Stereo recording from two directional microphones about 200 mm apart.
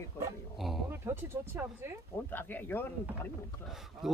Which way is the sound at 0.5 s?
Centre (ahead or behind).